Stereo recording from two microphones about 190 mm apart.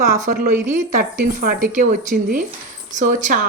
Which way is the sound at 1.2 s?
50° right (ahead or behind).